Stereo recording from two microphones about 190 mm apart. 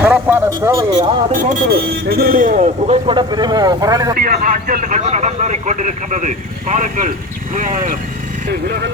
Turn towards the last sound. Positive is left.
turn(degrees=-40)  # may be behind; listen again after turning